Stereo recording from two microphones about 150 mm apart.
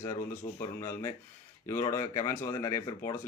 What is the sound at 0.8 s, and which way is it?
Speech, 20° left (ahead or behind).